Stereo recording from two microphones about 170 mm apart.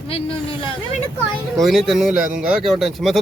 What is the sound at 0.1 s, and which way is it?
Speech, 30° left (ahead or behind).